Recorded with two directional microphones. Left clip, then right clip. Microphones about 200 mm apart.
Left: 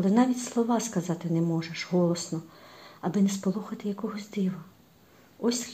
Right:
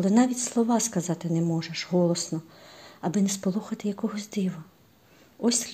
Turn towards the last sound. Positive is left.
turn(degrees=-40)  # may be behind; listen again after turning